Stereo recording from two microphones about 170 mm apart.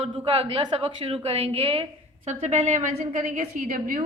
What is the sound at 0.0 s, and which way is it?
A woman's voice, 35° right (ahead or behind).